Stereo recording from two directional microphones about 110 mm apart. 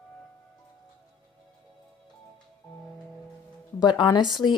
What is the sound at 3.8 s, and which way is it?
Speech, 45° left (ahead or behind).